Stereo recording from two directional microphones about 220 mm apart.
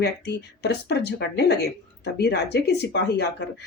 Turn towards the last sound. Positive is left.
turn(degrees=50)  # may be behind; listen again after turning